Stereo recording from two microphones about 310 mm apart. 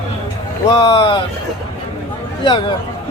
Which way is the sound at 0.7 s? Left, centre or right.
Centre.